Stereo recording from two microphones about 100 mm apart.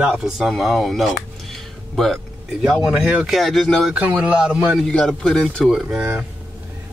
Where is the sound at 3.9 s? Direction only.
15° right (ahead or behind).